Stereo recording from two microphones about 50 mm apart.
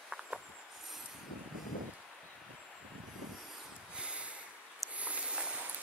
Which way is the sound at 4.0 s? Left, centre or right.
Right.